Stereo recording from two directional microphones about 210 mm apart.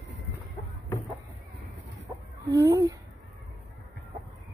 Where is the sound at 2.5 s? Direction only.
15° right (ahead or behind).